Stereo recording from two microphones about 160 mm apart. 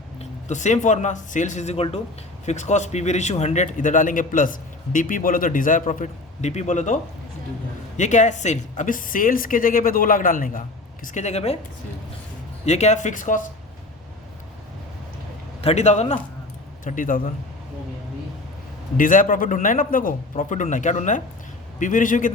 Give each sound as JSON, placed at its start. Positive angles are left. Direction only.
{"t": 0.2, "sound": "a man's voice", "side_deg": 50}
{"t": 12.6, "sound": "a man's voice", "side_deg": 45}
{"t": 15.6, "sound": "a man's voice", "side_deg": 45}
{"t": 16.8, "sound": "speech", "side_deg": 55}
{"t": 18.9, "sound": "a man's voice", "side_deg": 55}